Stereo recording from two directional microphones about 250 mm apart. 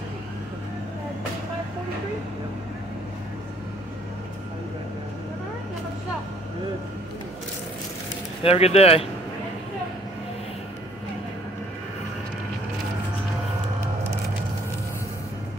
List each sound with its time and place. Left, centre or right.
8.5 s speech: left